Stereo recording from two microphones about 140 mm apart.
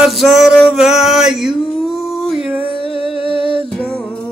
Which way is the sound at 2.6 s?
40° left (ahead or behind).